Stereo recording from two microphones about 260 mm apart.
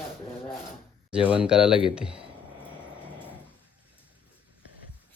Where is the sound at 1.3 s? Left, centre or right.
Centre.